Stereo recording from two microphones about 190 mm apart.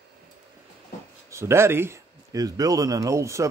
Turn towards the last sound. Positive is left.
turn(degrees=-15)  # may be behind; listen again after turning